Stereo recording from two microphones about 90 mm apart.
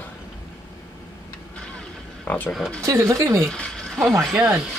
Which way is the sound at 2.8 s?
35° right (ahead or behind).